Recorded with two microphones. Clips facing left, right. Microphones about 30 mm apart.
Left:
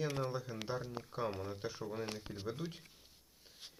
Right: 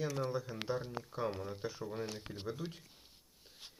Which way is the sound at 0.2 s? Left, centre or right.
Centre.